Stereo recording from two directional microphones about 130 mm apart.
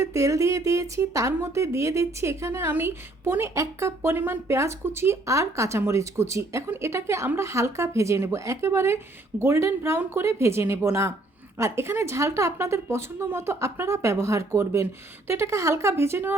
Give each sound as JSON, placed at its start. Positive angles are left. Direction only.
{"t": 0.0, "sound": "speech", "side_deg": -25}